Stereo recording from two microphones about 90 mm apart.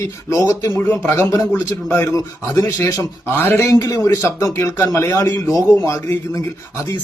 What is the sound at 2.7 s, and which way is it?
A man's voice, 25° left (ahead or behind).